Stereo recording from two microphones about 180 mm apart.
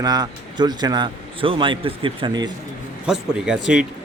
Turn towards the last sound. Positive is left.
turn(degrees=-5)  # may be behind; listen again after turning